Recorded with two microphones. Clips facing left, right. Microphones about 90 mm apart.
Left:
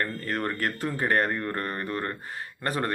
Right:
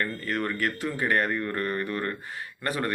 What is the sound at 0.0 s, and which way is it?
A man's voice, 35° left (ahead or behind).